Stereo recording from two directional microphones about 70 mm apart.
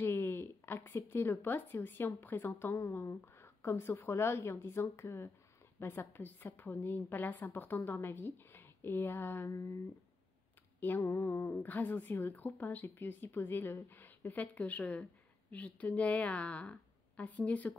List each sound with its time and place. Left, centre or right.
0.0 s a woman's voice: left
9.5 s speech: left
11.0 s a woman's voice: left
11.5 s speech: left